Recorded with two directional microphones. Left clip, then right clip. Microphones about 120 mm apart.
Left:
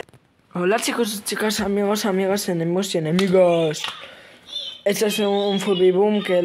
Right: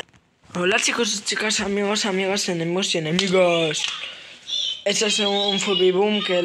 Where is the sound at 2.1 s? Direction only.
35° left (ahead or behind).